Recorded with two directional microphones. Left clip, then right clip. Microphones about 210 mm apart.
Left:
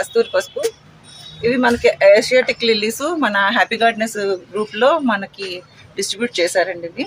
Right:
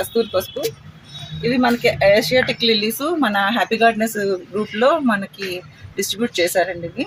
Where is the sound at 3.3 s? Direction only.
10° right (ahead or behind).